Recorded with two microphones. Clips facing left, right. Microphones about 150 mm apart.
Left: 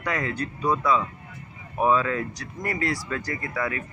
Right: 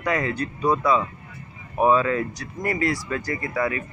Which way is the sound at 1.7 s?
10° right (ahead or behind).